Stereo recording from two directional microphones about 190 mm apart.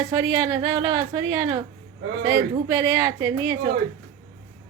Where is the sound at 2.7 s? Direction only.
20° right (ahead or behind).